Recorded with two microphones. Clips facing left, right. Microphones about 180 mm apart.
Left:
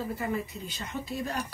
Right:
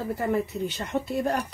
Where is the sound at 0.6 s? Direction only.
70° right (ahead or behind).